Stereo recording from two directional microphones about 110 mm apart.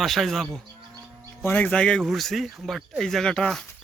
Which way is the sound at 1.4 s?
15° left (ahead or behind).